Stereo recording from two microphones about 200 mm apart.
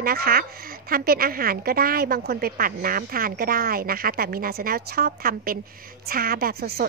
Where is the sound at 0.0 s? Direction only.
50° right (ahead or behind).